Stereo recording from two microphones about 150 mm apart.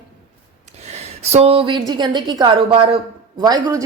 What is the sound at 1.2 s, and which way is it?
A woman's voice, 45° right (ahead or behind).